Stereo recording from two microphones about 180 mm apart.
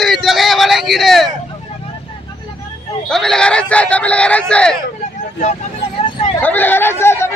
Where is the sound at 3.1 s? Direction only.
5° left (ahead or behind).